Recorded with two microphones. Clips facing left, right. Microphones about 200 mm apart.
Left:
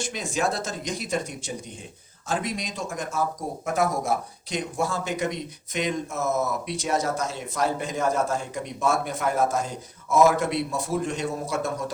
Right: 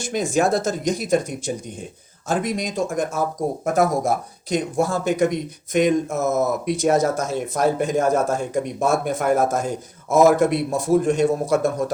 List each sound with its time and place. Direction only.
0.0 s a man's voice: 45° right (ahead or behind)